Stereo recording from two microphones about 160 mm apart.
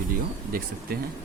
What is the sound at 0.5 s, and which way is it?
Speech, 65° right (ahead or behind).